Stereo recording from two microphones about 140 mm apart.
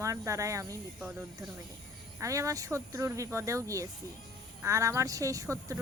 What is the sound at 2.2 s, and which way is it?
Speech, 20° right (ahead or behind).